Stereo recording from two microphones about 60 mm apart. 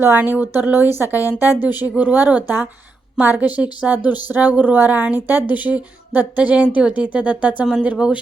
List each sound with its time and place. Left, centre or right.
0.2 s speech: right